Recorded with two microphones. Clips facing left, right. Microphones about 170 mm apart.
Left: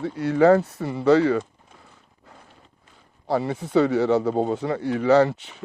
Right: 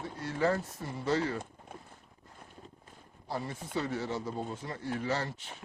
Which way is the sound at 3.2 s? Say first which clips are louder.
Left 13 dB; 75° left (ahead or behind).